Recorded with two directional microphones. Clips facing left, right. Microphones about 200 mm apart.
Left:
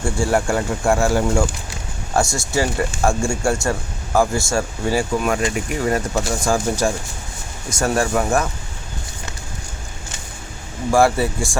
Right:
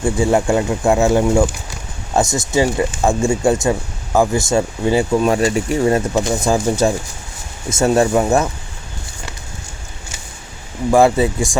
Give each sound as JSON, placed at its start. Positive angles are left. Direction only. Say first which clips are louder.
{"t": 0.0, "sound": "speech", "louder": "right 4 dB", "side_deg": -20}
{"t": 10.9, "sound": "speech", "louder": "right 4 dB", "side_deg": -20}